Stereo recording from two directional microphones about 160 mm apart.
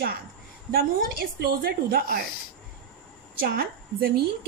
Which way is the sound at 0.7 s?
70° right (ahead or behind).